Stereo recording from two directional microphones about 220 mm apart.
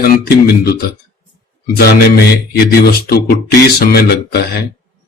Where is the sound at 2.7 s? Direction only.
45° left (ahead or behind).